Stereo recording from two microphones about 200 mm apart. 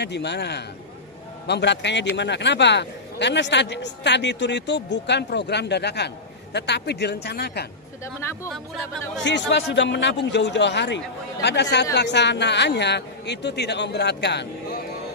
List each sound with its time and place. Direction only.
0.0 s speech: 60° left (ahead or behind)
9.2 s speech: 60° left (ahead or behind)